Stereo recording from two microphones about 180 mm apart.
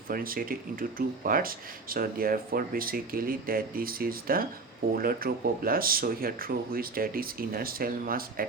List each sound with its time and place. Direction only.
0.1 s speech: 55° right (ahead or behind)